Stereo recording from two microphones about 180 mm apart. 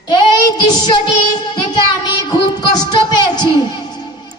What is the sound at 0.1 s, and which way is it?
Child singing, 20° left (ahead or behind).